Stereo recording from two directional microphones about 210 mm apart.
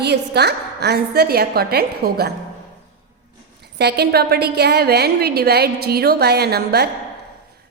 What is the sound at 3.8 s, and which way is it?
A woman's voice, 50° right (ahead or behind).